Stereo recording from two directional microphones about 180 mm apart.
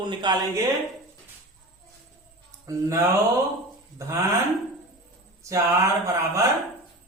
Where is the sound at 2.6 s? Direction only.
20° right (ahead or behind).